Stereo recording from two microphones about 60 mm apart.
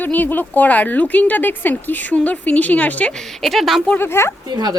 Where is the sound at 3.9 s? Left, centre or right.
Left.